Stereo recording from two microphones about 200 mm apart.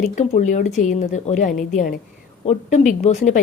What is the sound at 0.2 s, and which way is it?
A woman's voice, 35° left (ahead or behind).